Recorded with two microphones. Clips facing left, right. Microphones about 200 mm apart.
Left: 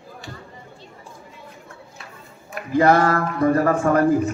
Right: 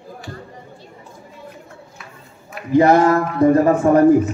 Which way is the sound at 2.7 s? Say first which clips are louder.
Right 4 dB; 20° right (ahead or behind).